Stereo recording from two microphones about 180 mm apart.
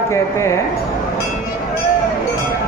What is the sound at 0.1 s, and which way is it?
Speech, 15° left (ahead or behind).